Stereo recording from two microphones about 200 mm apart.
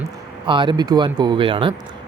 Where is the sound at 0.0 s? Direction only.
25° right (ahead or behind).